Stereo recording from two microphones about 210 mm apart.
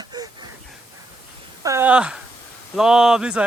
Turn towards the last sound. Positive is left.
turn(degrees=-5)  # may be behind; listen again after turning